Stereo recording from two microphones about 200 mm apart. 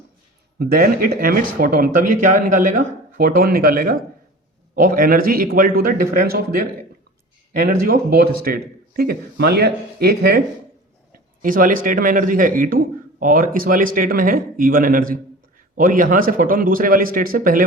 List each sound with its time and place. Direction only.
0.6 s a man's voice: 45° right (ahead or behind)
7.9 s a man's voice: 50° right (ahead or behind)
11.4 s a man's voice: 45° right (ahead or behind)